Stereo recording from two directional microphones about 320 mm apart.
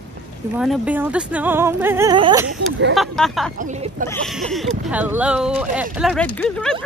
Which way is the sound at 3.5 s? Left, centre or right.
Right.